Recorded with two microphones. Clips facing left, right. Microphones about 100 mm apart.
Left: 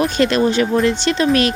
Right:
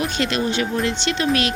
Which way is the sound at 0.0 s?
45° left (ahead or behind).